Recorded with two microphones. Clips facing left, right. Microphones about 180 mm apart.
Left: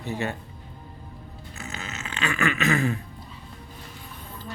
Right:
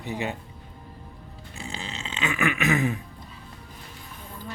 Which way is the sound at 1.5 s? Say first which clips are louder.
Right 1 dB; 30° right (ahead or behind).